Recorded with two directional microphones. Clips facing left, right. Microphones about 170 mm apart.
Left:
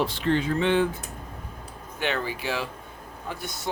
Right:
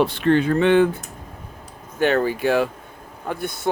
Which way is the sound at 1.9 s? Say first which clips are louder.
Right 10 dB; 45° right (ahead or behind).